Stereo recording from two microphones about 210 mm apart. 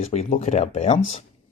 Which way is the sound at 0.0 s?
30° left (ahead or behind).